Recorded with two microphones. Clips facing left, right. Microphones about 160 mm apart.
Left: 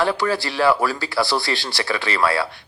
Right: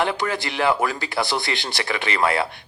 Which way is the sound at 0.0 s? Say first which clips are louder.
Left 3 dB; 20° right (ahead or behind).